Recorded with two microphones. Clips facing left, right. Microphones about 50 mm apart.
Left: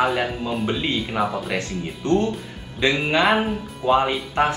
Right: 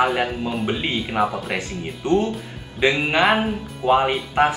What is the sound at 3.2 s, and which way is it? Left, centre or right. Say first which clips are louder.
Speech: right 1 dB; centre.